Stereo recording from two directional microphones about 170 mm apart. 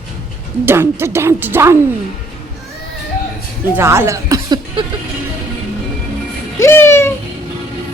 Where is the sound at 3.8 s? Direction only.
15° right (ahead or behind).